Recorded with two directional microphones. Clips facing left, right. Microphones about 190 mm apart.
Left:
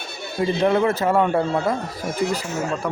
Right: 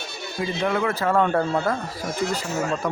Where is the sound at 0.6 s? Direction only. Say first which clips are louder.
Left 4 dB; 30° left (ahead or behind).